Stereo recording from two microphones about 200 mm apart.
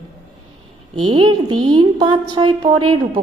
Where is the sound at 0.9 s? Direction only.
25° right (ahead or behind).